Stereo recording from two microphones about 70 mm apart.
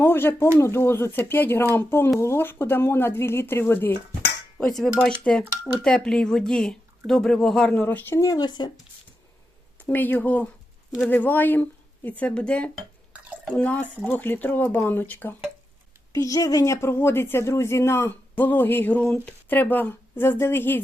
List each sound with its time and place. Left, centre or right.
0.0 s speech: left
4.7 s speech: centre
7.7 s a woman's voice: left
8.3 s speech: left
9.9 s a woman's voice: left
16.1 s a woman's voice: left
19.0 s speech: centre
19.5 s a woman's voice: left